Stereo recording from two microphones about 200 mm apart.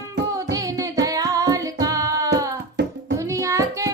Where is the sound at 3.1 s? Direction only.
15° right (ahead or behind).